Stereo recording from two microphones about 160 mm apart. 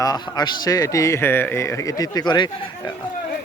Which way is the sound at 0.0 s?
25° left (ahead or behind).